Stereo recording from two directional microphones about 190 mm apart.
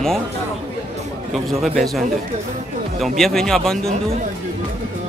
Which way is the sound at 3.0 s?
Centre (ahead or behind).